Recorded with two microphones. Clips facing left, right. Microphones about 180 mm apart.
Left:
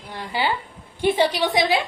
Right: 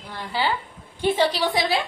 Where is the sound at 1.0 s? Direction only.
15° left (ahead or behind).